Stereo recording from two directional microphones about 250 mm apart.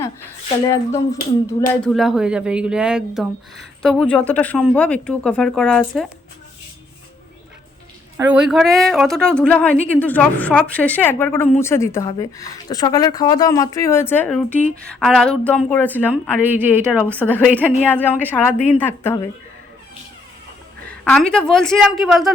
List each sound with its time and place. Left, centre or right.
0.7 s speech: centre
1.8 s speech: centre
8.3 s speech: centre
16.4 s speech: centre
17.8 s speech: centre
20.8 s speech: centre